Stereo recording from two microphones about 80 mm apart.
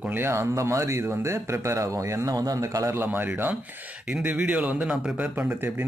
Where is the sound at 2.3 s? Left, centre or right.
Right.